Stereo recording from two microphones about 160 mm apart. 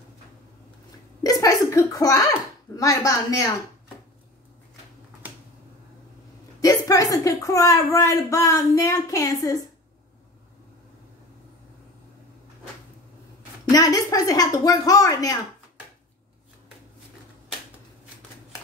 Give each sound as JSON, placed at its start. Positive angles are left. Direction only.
{"t": 1.2, "sound": "a child's voice", "side_deg": 20}
{"t": 6.6, "sound": "speech", "side_deg": 20}
{"t": 13.7, "sound": "speech", "side_deg": 20}